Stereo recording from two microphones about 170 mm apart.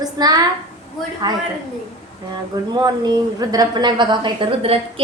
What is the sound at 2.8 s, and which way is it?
A woman's voice, 25° right (ahead or behind).